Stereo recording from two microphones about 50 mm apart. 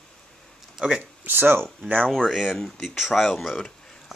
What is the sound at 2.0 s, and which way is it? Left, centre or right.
Speech, centre.